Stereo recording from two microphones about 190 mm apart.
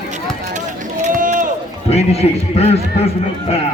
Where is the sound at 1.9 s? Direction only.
35° left (ahead or behind).